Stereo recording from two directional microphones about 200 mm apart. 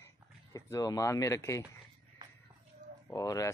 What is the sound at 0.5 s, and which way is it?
Speech, 15° left (ahead or behind).